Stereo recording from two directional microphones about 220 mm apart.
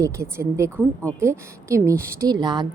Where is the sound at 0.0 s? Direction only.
15° right (ahead or behind).